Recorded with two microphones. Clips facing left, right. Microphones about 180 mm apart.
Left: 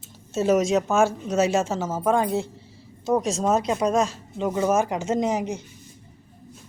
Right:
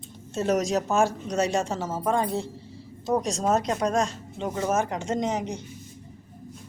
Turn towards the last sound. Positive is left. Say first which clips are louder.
# left 3 dB
turn(degrees=10)  # may be behind; listen again after turning